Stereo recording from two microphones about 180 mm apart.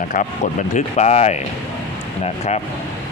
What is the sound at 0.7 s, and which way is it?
Speech, 40° left (ahead or behind).